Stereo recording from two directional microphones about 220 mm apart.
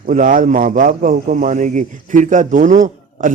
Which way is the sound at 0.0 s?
35° right (ahead or behind).